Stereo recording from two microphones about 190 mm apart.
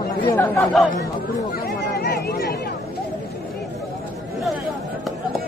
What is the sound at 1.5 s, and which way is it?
Chatter, 55° left (ahead or behind).